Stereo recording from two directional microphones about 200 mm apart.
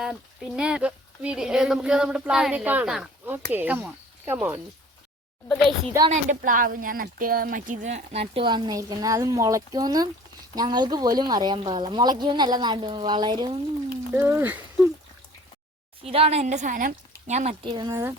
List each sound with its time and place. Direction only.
0.0 s speech: 5° right (ahead or behind)
6.1 s speech: 40° right (ahead or behind); by 13.6 s 20° right (ahead or behind)
14.1 s speech: 10° right (ahead or behind)
16.0 s a woman's voice: 30° right (ahead or behind)